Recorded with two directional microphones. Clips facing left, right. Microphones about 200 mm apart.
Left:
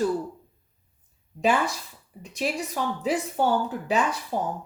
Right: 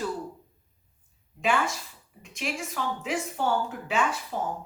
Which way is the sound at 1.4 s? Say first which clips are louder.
Left 3 dB; 40° left (ahead or behind).